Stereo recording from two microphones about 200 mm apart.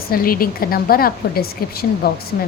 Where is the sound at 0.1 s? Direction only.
45° left (ahead or behind).